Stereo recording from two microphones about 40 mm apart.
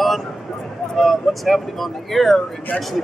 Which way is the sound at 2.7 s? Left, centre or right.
Left.